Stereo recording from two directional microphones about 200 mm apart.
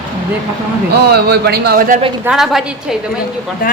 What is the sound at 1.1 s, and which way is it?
Speech, 55° right (ahead or behind).